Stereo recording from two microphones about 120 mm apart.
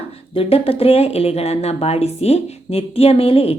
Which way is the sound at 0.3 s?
55° left (ahead or behind).